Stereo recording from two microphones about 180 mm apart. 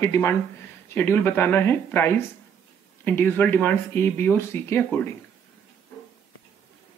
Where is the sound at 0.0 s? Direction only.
15° left (ahead or behind).